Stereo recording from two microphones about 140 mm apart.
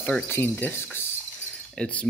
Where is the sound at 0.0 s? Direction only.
15° left (ahead or behind).